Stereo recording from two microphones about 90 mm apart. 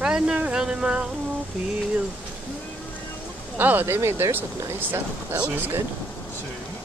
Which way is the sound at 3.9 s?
30° right (ahead or behind).